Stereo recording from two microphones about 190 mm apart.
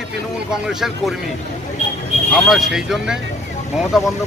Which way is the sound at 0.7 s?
Centre (ahead or behind).